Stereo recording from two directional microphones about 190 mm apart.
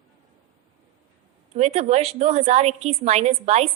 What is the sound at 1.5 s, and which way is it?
A woman's voice, 35° right (ahead or behind).